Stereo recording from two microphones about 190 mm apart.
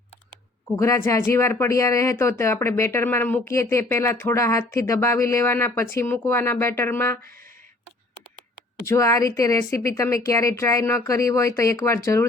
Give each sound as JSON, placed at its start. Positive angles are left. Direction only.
{"t": 0.8, "sound": "speech", "side_deg": 15}
{"t": 8.9, "sound": "speech", "side_deg": 15}